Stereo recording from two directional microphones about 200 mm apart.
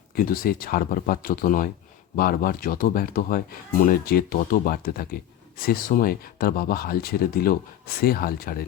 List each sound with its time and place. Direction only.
0.1 s speech: 45° left (ahead or behind)